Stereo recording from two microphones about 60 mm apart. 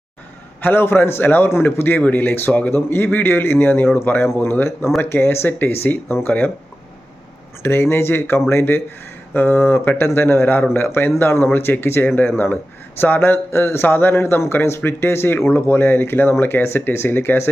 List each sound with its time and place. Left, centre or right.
0.6 s speech: left
7.6 s speech: left